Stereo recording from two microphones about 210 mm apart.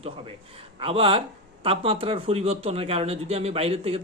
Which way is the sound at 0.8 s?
25° right (ahead or behind).